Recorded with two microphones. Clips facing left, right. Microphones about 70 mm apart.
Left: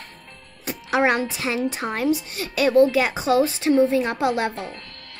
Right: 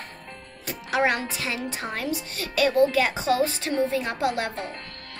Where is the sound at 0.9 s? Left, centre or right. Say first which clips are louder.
Left 4 dB; left.